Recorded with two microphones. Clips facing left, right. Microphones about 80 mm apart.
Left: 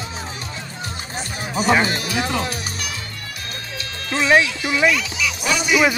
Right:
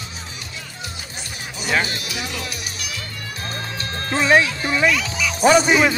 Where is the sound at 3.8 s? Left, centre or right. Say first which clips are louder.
Right 1 dB; right.